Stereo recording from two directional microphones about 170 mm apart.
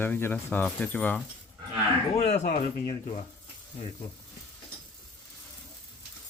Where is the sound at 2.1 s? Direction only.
40° left (ahead or behind).